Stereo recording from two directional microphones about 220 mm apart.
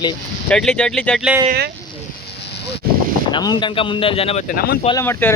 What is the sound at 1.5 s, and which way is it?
Speech, 45° right (ahead or behind).